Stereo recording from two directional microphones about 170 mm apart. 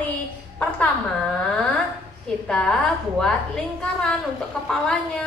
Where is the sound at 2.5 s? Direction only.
5° left (ahead or behind).